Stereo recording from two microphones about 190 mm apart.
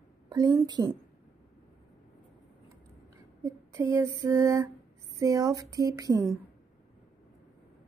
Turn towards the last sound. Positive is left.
turn(degrees=-15)  # may be behind; listen again after turning